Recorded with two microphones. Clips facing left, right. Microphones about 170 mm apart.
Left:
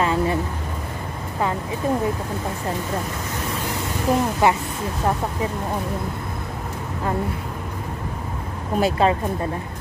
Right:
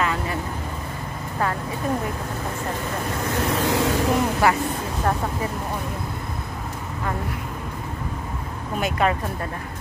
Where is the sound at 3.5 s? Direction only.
90° right.